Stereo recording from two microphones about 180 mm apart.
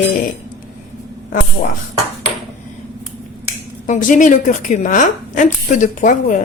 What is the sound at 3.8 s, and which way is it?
A woman's voice, 45° left (ahead or behind).